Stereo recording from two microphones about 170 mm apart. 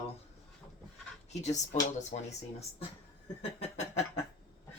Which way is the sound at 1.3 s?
40° left (ahead or behind).